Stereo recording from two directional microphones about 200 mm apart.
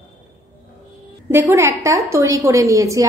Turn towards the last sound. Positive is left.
turn(degrees=-15)  # may be behind; listen again after turning